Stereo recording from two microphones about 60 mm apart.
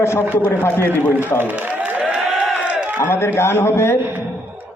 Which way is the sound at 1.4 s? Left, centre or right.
Right.